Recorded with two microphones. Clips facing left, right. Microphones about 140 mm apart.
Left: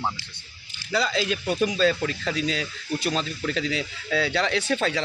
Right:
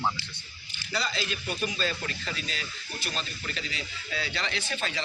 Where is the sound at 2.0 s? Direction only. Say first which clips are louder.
Left 10 dB; 90° left.